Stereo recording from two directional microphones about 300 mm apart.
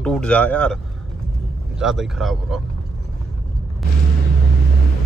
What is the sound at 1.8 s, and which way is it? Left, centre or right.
Speech, centre.